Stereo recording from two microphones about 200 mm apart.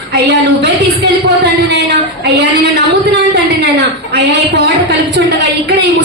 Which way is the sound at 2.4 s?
60° right (ahead or behind).